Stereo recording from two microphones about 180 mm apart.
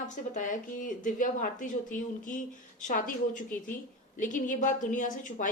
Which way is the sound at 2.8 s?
45° left (ahead or behind).